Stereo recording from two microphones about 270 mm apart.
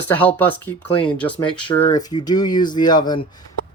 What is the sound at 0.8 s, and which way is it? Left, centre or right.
Speech, centre.